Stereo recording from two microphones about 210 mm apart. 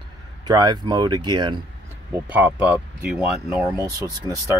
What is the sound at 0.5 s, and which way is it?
Speech, 20° right (ahead or behind).